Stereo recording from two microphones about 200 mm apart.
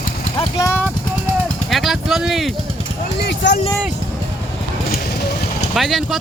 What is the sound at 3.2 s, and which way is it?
Speech, 55° left (ahead or behind).